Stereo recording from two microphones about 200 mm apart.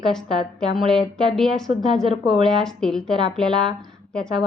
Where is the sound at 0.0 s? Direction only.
Centre (ahead or behind).